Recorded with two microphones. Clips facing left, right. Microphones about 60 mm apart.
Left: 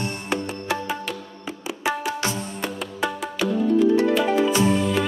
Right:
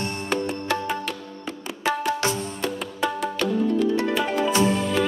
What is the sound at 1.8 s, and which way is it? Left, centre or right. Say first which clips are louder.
Tabla: right 2 dB; centre.